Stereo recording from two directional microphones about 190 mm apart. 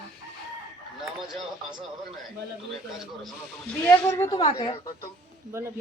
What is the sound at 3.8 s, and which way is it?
A woman's voice, 15° left (ahead or behind).